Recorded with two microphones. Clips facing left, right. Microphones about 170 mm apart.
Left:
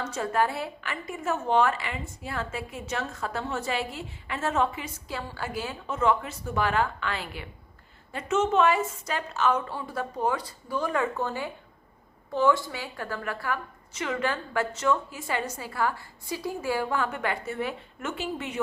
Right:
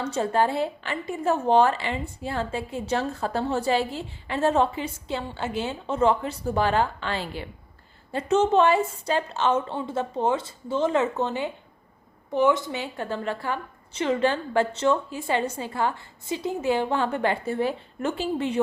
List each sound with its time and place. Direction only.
0.0 s a woman's voice: 30° right (ahead or behind)